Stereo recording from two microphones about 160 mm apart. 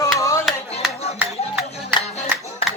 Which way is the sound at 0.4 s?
5° right (ahead or behind).